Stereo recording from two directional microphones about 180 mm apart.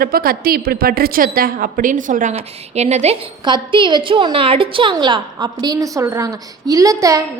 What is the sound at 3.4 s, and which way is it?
A woman's voice, 25° right (ahead or behind).